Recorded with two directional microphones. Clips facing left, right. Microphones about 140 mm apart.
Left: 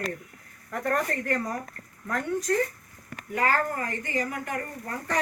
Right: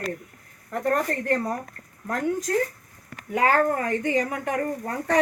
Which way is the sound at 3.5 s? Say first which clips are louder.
Right 7 dB; 65° right (ahead or behind).